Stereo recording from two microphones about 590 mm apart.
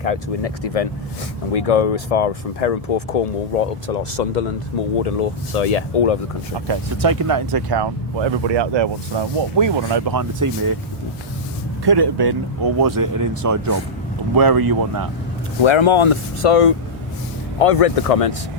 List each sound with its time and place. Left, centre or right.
0.0 s speech: left
4.9 s speech: left
6.7 s speech: right
10.2 s speech: right
11.9 s speech: right
15.6 s speech: left